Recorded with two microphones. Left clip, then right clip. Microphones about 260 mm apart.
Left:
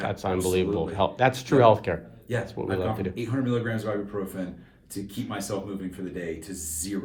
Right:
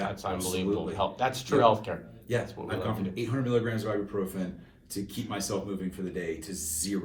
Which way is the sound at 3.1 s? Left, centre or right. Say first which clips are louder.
Even; centre.